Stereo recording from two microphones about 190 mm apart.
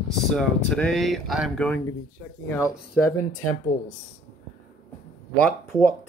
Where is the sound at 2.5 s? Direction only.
15° left (ahead or behind).